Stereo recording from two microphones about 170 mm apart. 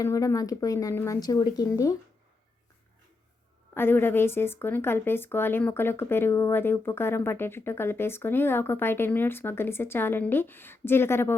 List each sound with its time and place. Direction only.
0.0 s speech: 20° left (ahead or behind)
3.8 s speech: 15° left (ahead or behind)